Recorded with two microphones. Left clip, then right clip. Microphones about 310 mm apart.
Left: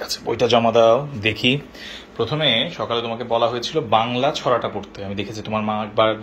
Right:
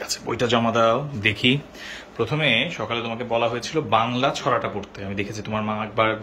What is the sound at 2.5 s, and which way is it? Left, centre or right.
Speech, centre.